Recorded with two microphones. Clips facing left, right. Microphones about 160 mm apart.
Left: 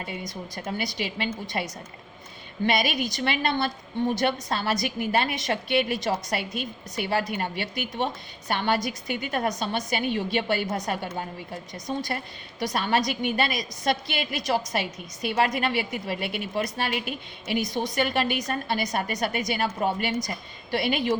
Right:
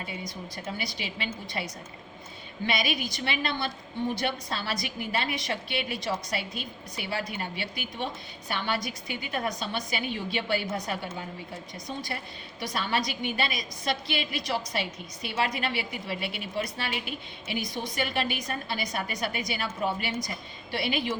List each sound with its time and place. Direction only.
0.5 s a woman's voice: 45° left (ahead or behind)
2.6 s a woman's voice: 50° left (ahead or behind)